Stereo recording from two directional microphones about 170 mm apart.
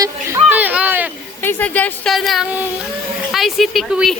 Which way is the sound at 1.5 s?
10° left (ahead or behind).